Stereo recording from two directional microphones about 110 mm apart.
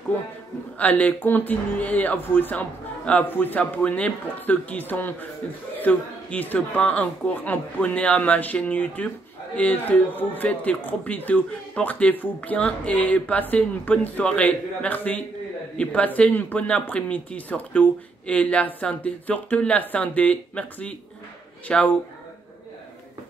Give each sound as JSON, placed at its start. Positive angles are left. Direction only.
{"t": 0.7, "sound": "speech", "side_deg": 15}